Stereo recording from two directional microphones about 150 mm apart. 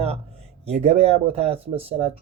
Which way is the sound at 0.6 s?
45° right (ahead or behind).